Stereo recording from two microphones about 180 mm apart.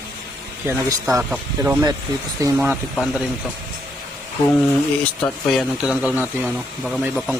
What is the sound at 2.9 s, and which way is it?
Speech, centre (ahead or behind).